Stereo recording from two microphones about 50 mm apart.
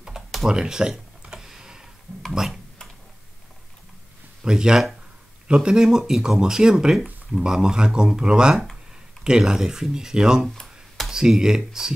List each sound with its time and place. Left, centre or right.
0.2 s computer keyboard: centre
0.5 s tick-tock: centre
2.3 s speech: centre
4.4 s speech: centre